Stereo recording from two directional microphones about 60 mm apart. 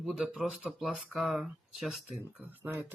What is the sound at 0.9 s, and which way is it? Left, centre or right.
Speech, right.